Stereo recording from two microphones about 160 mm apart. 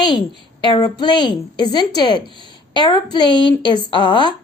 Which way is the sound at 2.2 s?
30° right (ahead or behind).